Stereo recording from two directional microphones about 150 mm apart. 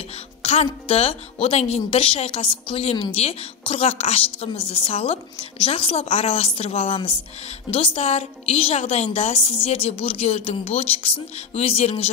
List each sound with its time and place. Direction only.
0.4 s a woman's voice: 40° left (ahead or behind)